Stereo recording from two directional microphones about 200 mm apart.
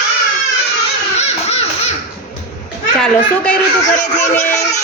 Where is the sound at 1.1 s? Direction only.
30° left (ahead or behind).